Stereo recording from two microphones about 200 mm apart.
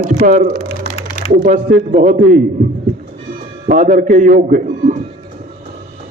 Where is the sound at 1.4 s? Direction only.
40° right (ahead or behind).